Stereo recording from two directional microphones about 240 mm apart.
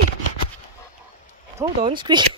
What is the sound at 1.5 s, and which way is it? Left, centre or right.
Speech, centre.